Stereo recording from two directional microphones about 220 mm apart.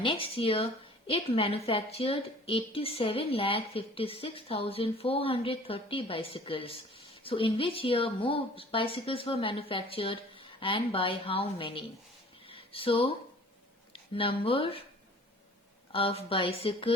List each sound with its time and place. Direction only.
0.0 s a woman's voice: 25° left (ahead or behind)
12.5 s a sound: 25° left (ahead or behind)
13.9 s speech: 25° left (ahead or behind)
15.9 s a woman's voice: 25° left (ahead or behind)